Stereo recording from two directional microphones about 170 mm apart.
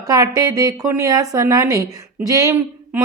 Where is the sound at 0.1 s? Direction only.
20° right (ahead or behind).